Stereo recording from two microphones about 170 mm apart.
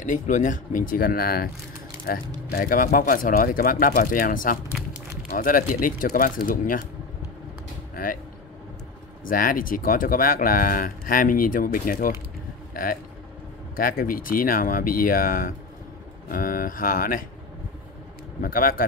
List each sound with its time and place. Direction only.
0.0 s speech: 50° left (ahead or behind)
7.9 s speech: 55° left (ahead or behind)
9.2 s speech: 55° left (ahead or behind)
18.4 s speech: 55° left (ahead or behind)